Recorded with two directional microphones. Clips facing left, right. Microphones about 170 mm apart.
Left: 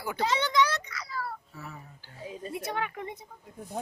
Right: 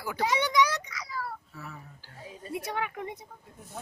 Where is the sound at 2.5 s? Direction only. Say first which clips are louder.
Right 1 dB; 10° right (ahead or behind).